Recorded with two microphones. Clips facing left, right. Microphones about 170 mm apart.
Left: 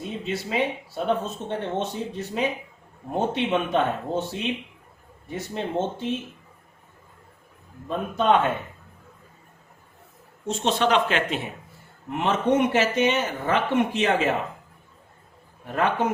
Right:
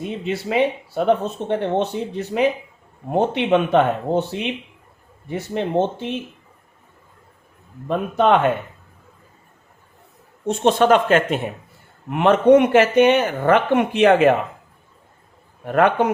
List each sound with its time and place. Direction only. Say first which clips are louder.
0.0 s speech: right 5 dB; 70° right (ahead or behind)
7.9 s speech: right 5 dB; 70° right (ahead or behind)
10.4 s speech: right 7 dB; 55° right (ahead or behind)
12.1 s speech: right 9 dB; 65° right (ahead or behind)
15.6 s speech: right 7 dB; 65° right (ahead or behind)